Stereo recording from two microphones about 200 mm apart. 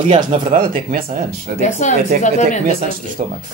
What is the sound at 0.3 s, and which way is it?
Speech, 30° right (ahead or behind).